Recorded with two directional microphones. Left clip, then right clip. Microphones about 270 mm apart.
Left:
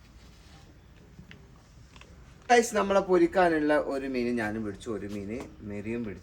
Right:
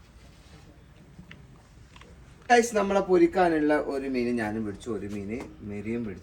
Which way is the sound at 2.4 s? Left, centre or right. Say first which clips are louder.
Right 1 dB; centre.